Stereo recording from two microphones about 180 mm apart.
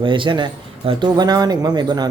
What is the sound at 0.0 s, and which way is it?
Speech, 25° right (ahead or behind).